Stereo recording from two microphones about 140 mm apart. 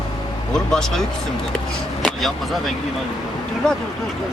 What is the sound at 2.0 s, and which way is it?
Speech, centre (ahead or behind).